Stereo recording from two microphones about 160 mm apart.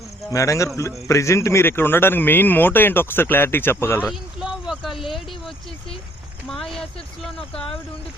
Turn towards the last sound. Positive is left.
turn(degrees=0)  # may be behind; listen again after turning